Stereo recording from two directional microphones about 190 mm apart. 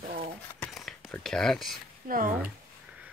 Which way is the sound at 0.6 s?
Centre (ahead or behind).